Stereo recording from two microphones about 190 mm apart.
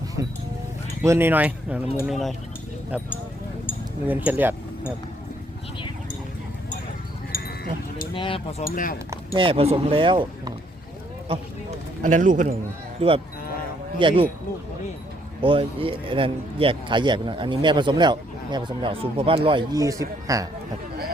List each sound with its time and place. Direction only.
0.2 s music: 15° right (ahead or behind)
1.0 s speech: 15° right (ahead or behind)
7.3 s sheep: 50° left (ahead or behind)
8.1 s speech: 25° left (ahead or behind)
8.6 s speech: 50° left (ahead or behind)
9.3 s speech: 30° right (ahead or behind)
11.3 s a man's voice: 35° right (ahead or behind)
13.0 s speech: 30° right (ahead or behind)
15.4 s speech: 30° right (ahead or behind)